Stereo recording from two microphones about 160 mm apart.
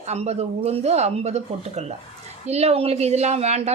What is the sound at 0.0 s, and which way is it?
A woman's voice, 40° right (ahead or behind).